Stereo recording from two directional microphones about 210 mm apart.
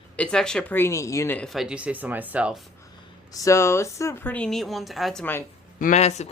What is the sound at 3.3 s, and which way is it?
Speech, 15° left (ahead or behind).